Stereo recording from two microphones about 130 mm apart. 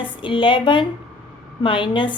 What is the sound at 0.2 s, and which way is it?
A woman's voice, 40° left (ahead or behind).